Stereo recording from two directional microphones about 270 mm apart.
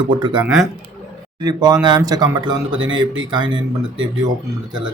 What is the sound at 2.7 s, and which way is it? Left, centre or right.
Speech, right.